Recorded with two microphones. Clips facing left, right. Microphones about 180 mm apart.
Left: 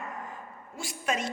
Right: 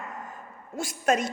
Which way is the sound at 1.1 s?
45° right (ahead or behind).